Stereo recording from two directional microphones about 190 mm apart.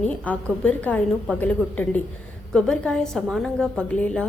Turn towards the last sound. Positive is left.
turn(degrees=5)  # may be behind; listen again after turning